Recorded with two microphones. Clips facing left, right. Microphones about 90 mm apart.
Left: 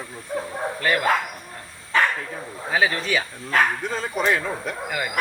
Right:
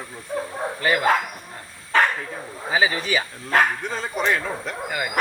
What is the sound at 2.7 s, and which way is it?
Speech, 5° right (ahead or behind).